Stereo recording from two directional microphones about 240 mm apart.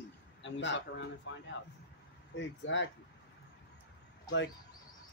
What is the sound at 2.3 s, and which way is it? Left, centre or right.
Speech, left.